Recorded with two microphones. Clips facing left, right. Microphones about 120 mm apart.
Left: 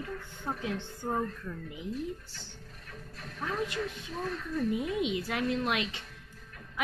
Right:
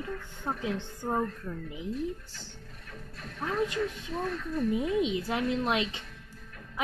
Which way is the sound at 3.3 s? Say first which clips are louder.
Right 4 dB; 25° right (ahead or behind).